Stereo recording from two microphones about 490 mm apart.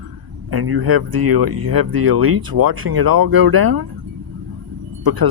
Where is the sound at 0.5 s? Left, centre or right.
Right.